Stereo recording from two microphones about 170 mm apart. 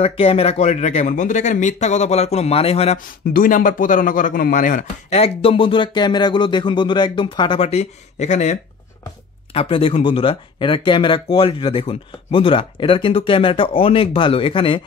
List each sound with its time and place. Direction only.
0.0 s speech: 35° left (ahead or behind)
3.3 s speech: 55° left (ahead or behind)
5.2 s speech: 35° left (ahead or behind)